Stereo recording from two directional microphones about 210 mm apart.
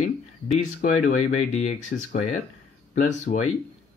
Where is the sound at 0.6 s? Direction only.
35° left (ahead or behind).